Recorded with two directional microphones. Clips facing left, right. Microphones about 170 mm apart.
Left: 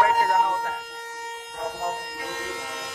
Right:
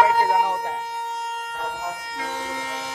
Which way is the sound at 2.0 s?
90° right.